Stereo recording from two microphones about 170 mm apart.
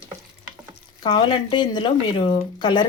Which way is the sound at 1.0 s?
30° left (ahead or behind).